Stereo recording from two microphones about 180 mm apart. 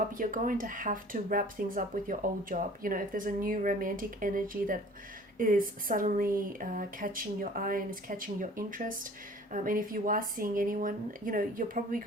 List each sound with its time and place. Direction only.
0.1 s speech: 50° right (ahead or behind)